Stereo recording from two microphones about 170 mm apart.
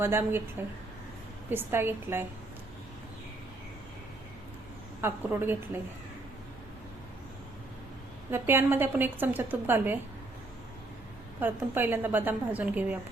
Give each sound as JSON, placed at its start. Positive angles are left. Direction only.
{"t": 0.0, "sound": "a woman's voice", "side_deg": -15}
{"t": 1.5, "sound": "a woman's voice", "side_deg": -15}
{"t": 4.9, "sound": "a woman's voice", "side_deg": -15}
{"t": 8.3, "sound": "a woman's voice", "side_deg": -15}
{"t": 11.3, "sound": "a woman's voice", "side_deg": -10}